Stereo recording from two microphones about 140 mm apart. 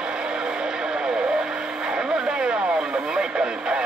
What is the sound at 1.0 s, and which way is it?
Radio, 5° right (ahead or behind).